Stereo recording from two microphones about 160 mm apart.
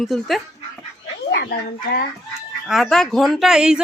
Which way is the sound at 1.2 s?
90° left.